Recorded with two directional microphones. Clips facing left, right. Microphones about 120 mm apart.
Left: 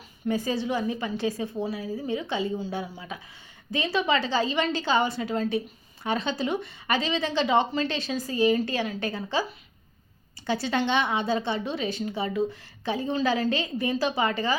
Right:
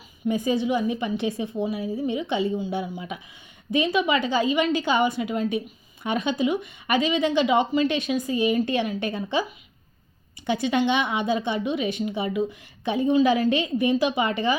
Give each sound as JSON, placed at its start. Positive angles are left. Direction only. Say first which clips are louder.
{"t": 0.3, "sound": "a woman's voice", "louder": "right 4 dB", "side_deg": -15}
{"t": 10.4, "sound": "a woman's voice", "louder": "right 4 dB", "side_deg": -15}